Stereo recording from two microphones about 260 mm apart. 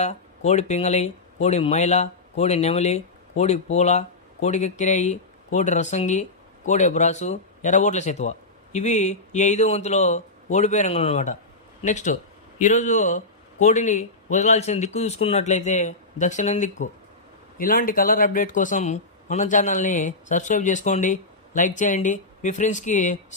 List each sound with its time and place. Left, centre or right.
0.0 s speech: left